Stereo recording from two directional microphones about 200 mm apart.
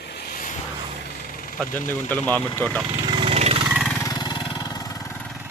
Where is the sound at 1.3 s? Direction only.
45° left (ahead or behind).